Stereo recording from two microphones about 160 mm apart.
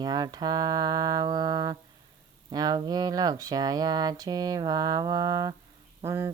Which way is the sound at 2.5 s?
25° right (ahead or behind).